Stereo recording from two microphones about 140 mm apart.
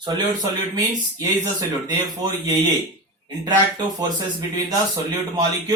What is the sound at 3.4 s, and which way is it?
Speech, 30° right (ahead or behind).